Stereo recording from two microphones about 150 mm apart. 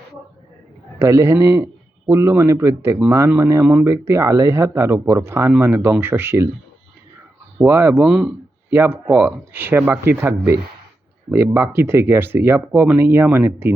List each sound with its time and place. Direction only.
0.9 s a man's voice: 20° right (ahead or behind)
7.6 s speech: 15° right (ahead or behind)